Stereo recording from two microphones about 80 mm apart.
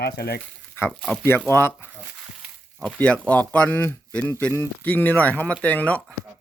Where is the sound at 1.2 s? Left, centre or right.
Left.